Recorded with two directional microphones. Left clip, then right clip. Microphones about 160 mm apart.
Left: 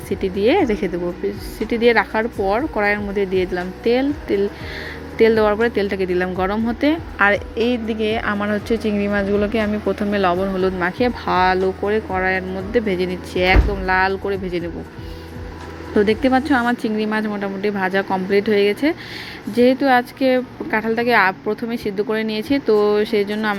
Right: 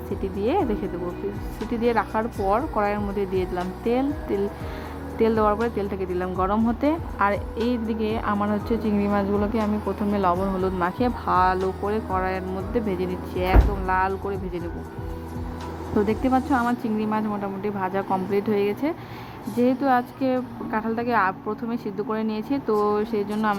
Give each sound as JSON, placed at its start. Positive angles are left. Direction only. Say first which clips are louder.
{"t": 0.2, "sound": "speech", "louder": "left 7 dB", "side_deg": 25}
{"t": 16.0, "sound": "speech", "louder": "left 6 dB", "side_deg": 25}